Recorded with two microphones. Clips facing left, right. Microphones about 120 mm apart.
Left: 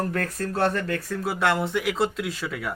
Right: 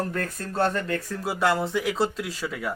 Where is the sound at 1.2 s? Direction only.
Centre (ahead or behind).